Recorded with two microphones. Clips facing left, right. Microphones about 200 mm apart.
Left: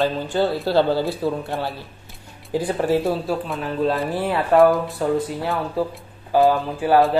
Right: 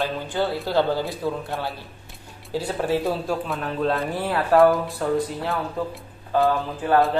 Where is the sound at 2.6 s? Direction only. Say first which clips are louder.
Left 3 dB; 15° left (ahead or behind).